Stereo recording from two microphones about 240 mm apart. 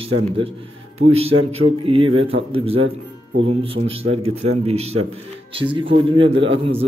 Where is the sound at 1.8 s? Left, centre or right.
Right.